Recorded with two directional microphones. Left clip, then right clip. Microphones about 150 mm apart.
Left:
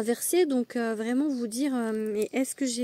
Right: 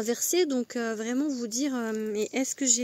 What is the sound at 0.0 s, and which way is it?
Speech, 25° left (ahead or behind).